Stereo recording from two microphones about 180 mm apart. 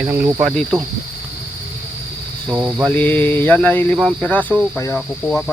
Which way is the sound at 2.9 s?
10° left (ahead or behind).